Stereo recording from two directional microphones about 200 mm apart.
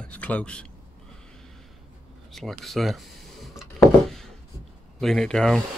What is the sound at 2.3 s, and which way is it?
Speech, centre (ahead or behind).